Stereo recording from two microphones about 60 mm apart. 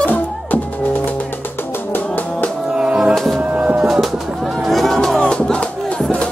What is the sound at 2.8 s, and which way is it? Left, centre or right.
Music, centre.